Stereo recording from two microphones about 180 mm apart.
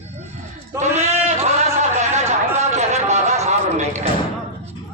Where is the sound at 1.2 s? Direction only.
40° right (ahead or behind).